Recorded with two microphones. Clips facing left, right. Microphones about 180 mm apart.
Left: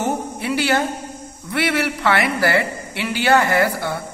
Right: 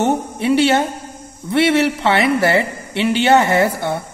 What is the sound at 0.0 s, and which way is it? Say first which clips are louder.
A woman's voice: right 5 dB; 25° right (ahead or behind).